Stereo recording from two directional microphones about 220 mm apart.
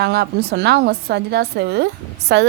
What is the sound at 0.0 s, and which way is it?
A woman's voice, 50° right (ahead or behind).